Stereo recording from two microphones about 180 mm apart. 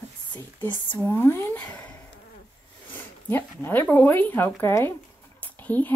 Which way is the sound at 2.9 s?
10° left (ahead or behind).